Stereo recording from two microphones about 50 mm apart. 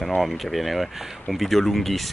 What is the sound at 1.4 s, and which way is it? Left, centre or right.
Speech, centre.